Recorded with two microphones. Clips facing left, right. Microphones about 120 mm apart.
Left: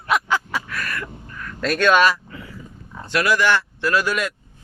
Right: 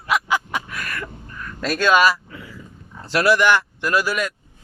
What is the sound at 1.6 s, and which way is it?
Speech, 5° right (ahead or behind).